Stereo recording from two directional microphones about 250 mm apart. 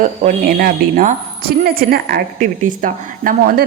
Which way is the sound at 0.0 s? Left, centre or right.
Right.